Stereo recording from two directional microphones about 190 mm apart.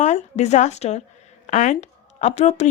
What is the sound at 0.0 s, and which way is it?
A woman's voice, 35° left (ahead or behind).